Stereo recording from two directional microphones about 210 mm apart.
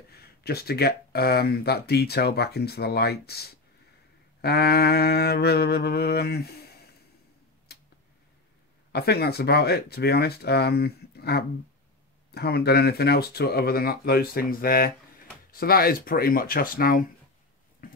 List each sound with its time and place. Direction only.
0.1 s speech: 50° left (ahead or behind)
7.7 s tick-tock: 50° left (ahead or behind)
8.9 s speech: 50° left (ahead or behind)
17.8 s a sound: 45° left (ahead or behind)